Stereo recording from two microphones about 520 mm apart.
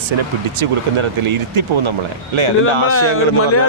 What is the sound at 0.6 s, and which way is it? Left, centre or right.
Speech, right.